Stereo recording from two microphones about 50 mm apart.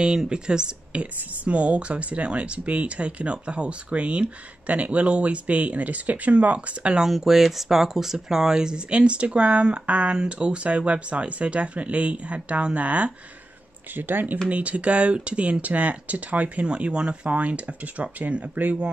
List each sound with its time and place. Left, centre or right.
0.0 s speech: centre
7.1 s speech: centre; by 13.1 s right
13.9 s speech: right
14.5 s speech: right